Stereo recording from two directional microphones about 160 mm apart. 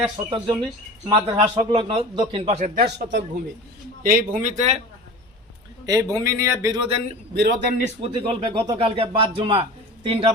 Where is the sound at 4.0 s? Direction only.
60° right (ahead or behind).